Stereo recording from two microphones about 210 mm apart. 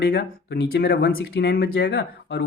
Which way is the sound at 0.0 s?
50° left (ahead or behind).